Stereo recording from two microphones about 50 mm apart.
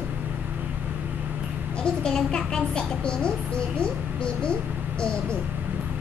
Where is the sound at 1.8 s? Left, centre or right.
Centre.